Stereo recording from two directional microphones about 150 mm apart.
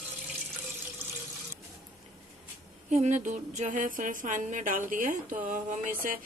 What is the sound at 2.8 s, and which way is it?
Speech, 55° right (ahead or behind).